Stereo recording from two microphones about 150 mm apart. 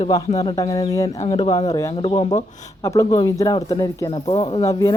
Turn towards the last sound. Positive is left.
turn(degrees=25)  # may be behind; listen again after turning